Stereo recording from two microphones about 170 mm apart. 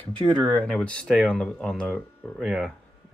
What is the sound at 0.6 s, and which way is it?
Speech, 5° left (ahead or behind).